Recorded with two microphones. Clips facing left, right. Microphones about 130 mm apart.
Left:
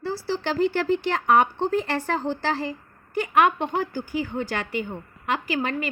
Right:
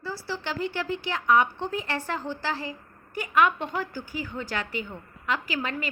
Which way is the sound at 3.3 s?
60° left (ahead or behind).